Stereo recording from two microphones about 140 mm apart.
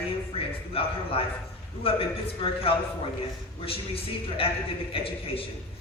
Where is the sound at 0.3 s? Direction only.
40° left (ahead or behind).